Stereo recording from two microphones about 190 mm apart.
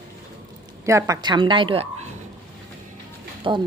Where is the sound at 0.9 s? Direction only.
15° right (ahead or behind).